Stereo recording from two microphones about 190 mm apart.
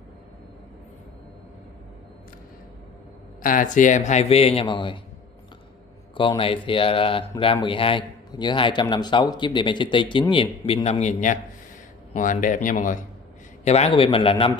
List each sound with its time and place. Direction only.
3.4 s a man's voice: 45° left (ahead or behind); by 5.0 s 25° left (ahead or behind)
6.1 s a man's voice: 25° left (ahead or behind); by 13.0 s 45° left (ahead or behind)
13.7 s a man's voice: 35° left (ahead or behind)